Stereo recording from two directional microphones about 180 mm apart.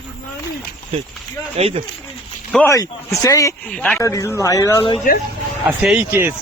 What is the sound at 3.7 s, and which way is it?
Speech, 5° left (ahead or behind).